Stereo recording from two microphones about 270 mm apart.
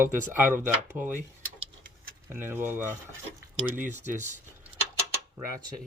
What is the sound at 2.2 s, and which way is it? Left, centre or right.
Speech, centre.